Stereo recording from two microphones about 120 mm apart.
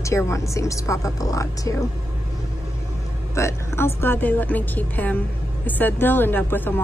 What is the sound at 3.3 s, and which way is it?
A woman's voice, 20° left (ahead or behind).